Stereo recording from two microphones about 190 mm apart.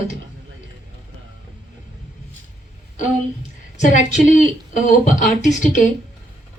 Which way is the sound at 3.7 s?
40° left (ahead or behind).